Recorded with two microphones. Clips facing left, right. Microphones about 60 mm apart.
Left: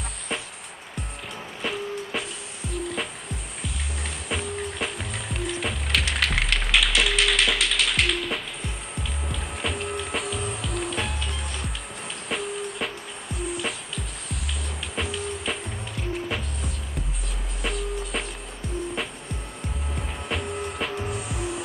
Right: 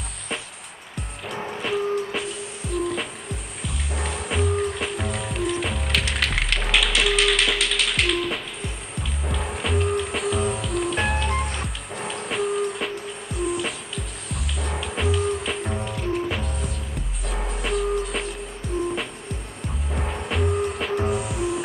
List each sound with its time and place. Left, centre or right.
1.6 s music: centre
11.1 s music: right
11.6 s music: centre
20.2 s music: centre